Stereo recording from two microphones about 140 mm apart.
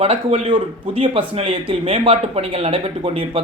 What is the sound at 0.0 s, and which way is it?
Speech, 50° right (ahead or behind).